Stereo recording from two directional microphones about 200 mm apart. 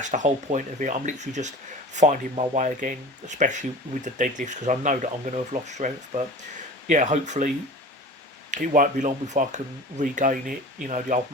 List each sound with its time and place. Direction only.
0.0 s speech: 40° right (ahead or behind)